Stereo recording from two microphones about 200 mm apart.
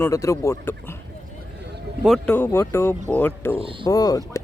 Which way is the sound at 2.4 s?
10° left (ahead or behind).